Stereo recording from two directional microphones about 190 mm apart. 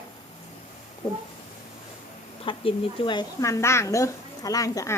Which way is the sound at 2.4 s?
30° left (ahead or behind).